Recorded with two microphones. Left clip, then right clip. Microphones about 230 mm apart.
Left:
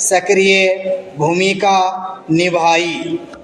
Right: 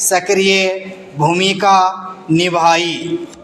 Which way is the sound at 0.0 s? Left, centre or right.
Right.